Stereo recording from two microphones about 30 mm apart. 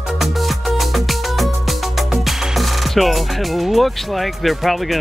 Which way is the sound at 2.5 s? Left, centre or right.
Centre.